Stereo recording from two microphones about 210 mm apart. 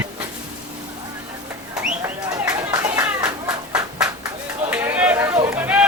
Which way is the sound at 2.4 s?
15° right (ahead or behind).